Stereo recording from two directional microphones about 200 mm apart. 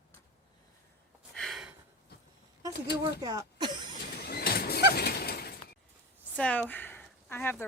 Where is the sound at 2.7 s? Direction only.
55° left (ahead or behind).